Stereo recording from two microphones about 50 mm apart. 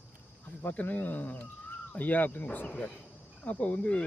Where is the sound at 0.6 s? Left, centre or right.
Left.